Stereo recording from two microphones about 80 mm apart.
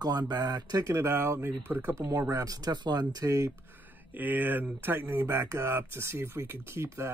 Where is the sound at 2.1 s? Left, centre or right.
Right.